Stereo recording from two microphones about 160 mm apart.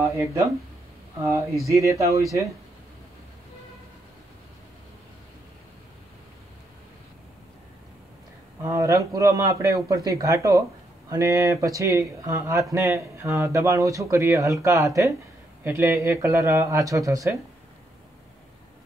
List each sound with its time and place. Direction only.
0.0 s speech: 20° right (ahead or behind)
1.7 s speech: 20° right (ahead or behind)
8.6 s speech: 15° right (ahead or behind)